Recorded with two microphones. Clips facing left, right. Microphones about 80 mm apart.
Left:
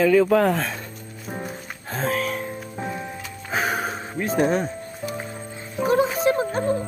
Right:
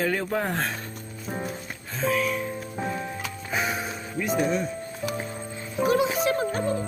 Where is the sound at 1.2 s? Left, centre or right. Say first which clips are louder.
Even; centre.